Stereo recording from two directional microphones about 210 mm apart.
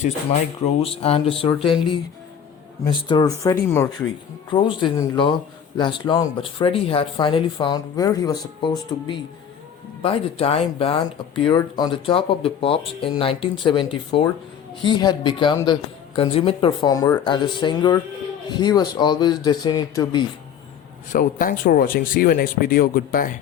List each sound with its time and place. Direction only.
0.6 s speech: 30° left (ahead or behind)
2.8 s speech: 20° left (ahead or behind)
21.1 s speech: 40° left (ahead or behind)